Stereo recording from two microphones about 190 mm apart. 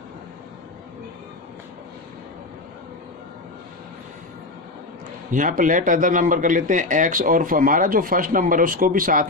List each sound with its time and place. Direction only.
5.3 s speech: 45° right (ahead or behind)